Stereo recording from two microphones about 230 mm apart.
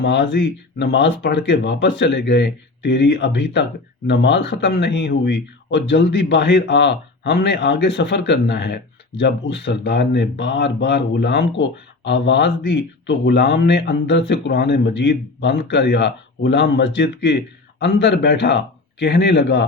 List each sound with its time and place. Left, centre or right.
0.0 s speech: left